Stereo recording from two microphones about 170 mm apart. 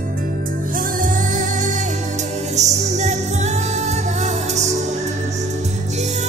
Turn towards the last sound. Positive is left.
turn(degrees=-40)  # may be behind; listen again after turning